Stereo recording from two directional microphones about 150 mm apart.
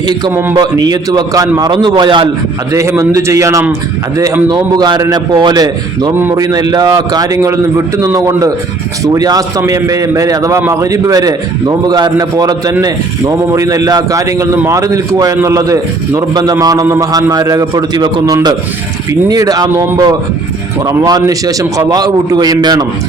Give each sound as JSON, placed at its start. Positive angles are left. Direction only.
{"t": 0.6, "sound": "a man's voice", "side_deg": -25}
{"t": 2.7, "sound": "a man's voice", "side_deg": -20}